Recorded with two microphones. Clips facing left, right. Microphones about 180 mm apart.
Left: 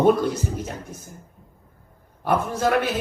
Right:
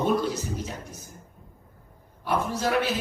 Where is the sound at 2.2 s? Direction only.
50° left (ahead or behind).